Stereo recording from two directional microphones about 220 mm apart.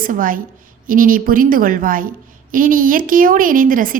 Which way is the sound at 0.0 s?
40° right (ahead or behind).